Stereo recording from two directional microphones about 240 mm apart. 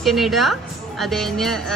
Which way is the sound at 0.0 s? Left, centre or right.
Centre.